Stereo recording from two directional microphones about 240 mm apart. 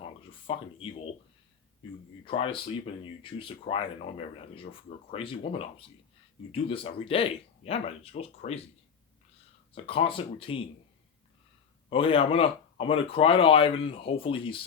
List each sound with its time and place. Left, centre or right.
0.0 s speech: left
2.2 s speech: left
9.7 s speech: left
11.9 s speech: left